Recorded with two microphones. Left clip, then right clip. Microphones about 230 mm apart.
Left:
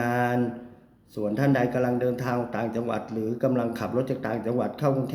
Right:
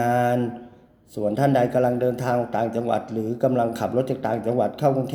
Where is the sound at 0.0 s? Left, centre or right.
Centre.